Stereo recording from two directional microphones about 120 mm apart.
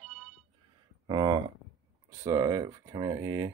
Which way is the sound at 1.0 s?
40° right (ahead or behind).